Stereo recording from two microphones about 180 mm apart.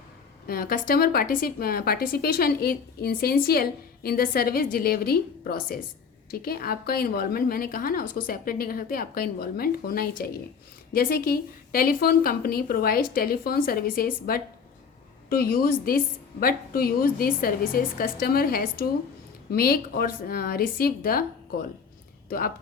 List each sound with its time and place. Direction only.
0.4 s a woman's voice: 55° left (ahead or behind)
22.3 s speech: 50° left (ahead or behind)